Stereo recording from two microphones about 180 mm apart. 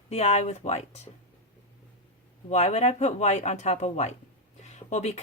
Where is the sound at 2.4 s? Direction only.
35° left (ahead or behind).